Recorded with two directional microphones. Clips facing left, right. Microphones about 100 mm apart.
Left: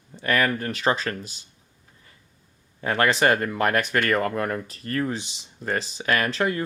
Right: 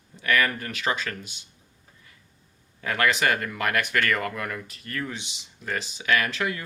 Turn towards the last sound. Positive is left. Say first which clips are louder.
# left 2 dB
turn(degrees=35)  # may be behind; listen again after turning